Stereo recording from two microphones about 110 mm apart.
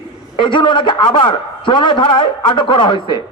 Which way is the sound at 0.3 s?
45° left (ahead or behind).